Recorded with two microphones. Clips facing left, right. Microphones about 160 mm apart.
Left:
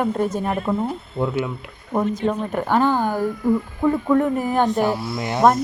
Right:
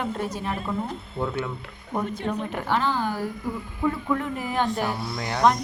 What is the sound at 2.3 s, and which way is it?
A woman's voice, 50° left (ahead or behind).